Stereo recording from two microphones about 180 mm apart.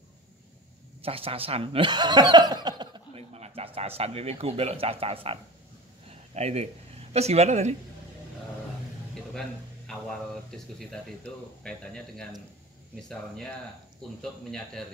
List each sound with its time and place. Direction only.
1.0 s speech: 30° right (ahead or behind)
3.3 s a man's voice: 35° right (ahead or behind)
9.3 s a man's voice: centre (ahead or behind)
14.5 s a man's voice: centre (ahead or behind)